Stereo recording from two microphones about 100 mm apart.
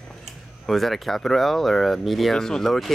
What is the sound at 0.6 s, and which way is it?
Speech, centre (ahead or behind).